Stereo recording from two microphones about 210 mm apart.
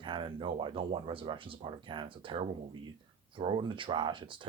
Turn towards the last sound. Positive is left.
turn(degrees=-25)  # may be behind; listen again after turning